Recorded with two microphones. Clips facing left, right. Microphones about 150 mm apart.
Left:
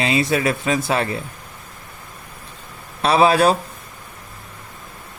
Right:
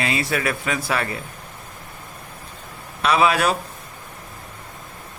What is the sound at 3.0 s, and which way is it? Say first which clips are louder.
Speech: left 4 dB; 30° left (ahead or behind).